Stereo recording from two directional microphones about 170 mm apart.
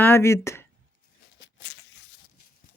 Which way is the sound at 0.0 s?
15° left (ahead or behind).